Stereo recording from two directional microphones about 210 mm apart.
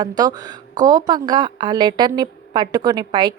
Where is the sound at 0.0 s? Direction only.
20° right (ahead or behind).